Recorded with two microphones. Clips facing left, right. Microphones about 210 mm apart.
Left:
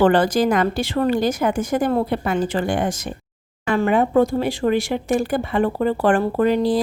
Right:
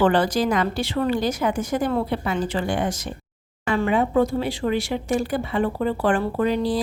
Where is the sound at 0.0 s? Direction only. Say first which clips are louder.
Left 3 dB; 50° left (ahead or behind).